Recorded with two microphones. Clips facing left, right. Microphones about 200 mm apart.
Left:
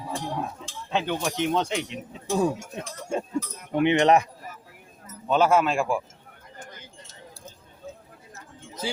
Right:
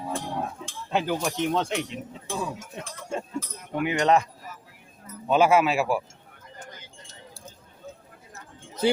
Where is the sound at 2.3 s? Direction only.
45° left (ahead or behind).